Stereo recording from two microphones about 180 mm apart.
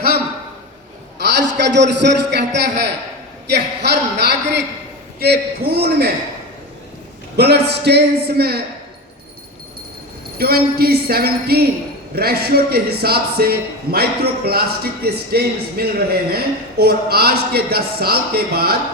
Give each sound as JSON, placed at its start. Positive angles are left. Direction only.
{"t": 1.2, "sound": "a man's voice", "side_deg": -75}
{"t": 7.3, "sound": "a man's voice", "side_deg": -65}
{"t": 10.3, "sound": "a man's voice", "side_deg": -60}